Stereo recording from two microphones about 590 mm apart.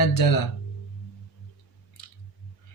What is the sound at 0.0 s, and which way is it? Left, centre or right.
Speech, left.